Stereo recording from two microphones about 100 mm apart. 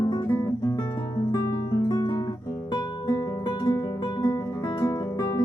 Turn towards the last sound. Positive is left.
turn(degrees=40)  # may be behind; listen again after turning